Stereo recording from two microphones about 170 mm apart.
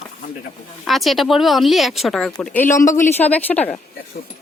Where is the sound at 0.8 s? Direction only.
Centre (ahead or behind).